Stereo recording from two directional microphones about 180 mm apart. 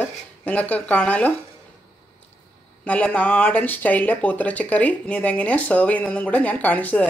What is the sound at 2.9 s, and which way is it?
Speech, 10° left (ahead or behind).